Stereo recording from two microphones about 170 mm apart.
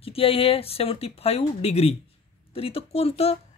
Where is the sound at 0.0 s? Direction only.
35° left (ahead or behind).